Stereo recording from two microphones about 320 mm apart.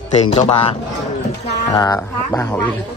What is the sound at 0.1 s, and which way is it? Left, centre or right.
A man's voice, centre.